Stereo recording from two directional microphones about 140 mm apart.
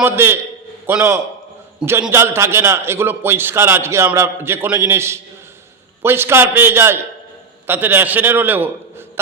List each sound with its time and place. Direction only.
0.0 s a man's voice: 15° right (ahead or behind)